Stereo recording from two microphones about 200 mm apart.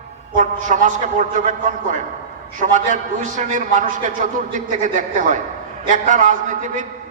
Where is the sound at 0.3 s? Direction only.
40° right (ahead or behind).